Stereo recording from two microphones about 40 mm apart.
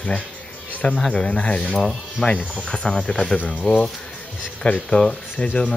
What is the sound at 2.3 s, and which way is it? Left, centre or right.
Speech, left.